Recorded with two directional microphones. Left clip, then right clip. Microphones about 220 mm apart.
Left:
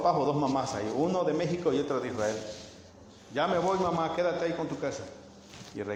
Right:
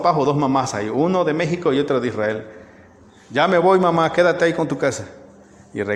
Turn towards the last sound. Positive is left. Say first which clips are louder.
# right 12 dB
turn(degrees=-50)  # may be behind; listen again after turning